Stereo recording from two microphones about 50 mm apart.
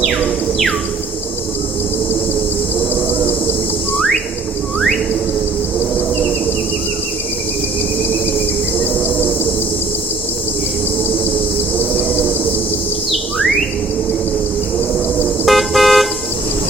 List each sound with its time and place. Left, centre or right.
8.8 s cricket: left
15.4 s car: centre